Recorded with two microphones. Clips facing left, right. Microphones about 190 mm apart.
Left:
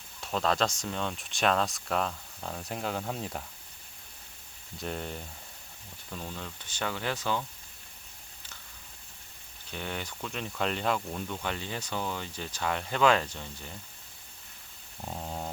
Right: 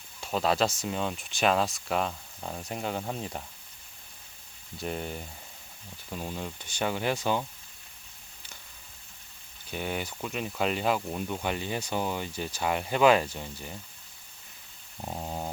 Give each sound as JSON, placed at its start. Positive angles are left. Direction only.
{"t": 0.2, "sound": "speech", "side_deg": -5}
{"t": 4.8, "sound": "speech", "side_deg": -5}
{"t": 6.1, "sound": "speech", "side_deg": -15}
{"t": 9.7, "sound": "speech", "side_deg": -10}
{"t": 15.0, "sound": "a sound", "side_deg": -15}